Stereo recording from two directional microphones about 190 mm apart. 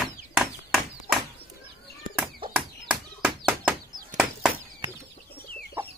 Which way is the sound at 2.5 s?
5° right (ahead or behind).